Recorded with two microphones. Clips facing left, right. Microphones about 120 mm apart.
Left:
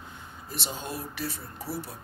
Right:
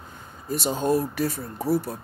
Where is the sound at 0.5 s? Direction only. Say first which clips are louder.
Right 13 dB; 45° right (ahead or behind).